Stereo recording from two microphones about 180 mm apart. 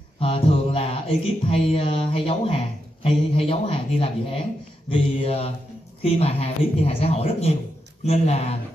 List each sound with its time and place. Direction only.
0.2 s mantra: 30° left (ahead or behind)
6.0 s speech: 35° left (ahead or behind)